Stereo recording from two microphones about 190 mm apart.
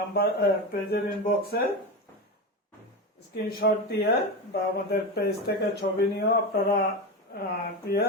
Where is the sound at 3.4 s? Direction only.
55° left (ahead or behind).